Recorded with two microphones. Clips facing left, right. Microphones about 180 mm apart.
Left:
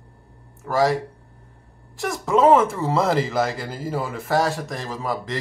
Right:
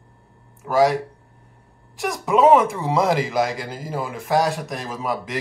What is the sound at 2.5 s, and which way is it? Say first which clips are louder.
Speech: right 1 dB; 15° right (ahead or behind).